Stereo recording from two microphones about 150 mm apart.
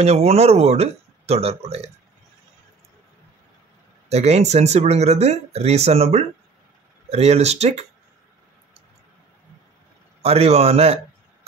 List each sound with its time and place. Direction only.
0.0 s speech: 45° right (ahead or behind)
4.1 s speech: 45° right (ahead or behind)
10.2 s speech: 45° right (ahead or behind)